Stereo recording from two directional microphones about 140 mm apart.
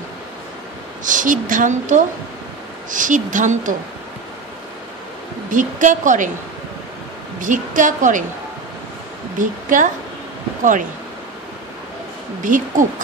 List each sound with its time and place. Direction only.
1.0 s a woman's voice: 65° right (ahead or behind)
5.5 s a woman's voice: 65° right (ahead or behind)
7.3 s a woman's voice: 65° right (ahead or behind)
9.4 s a woman's voice: 65° right (ahead or behind)
12.4 s a woman's voice: 65° right (ahead or behind)